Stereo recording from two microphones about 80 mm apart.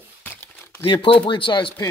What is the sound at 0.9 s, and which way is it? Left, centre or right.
Speech, left.